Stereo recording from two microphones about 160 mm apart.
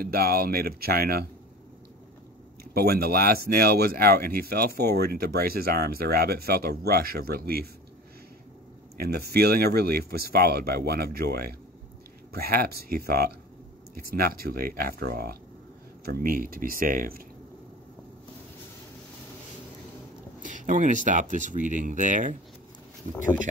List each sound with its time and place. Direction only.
0.0 s speech: 70° right (ahead or behind)
2.7 s speech: 75° right (ahead or behind)
8.9 s speech: 75° right (ahead or behind)
16.1 s speech: 65° right (ahead or behind)
20.4 s speech: 55° right (ahead or behind)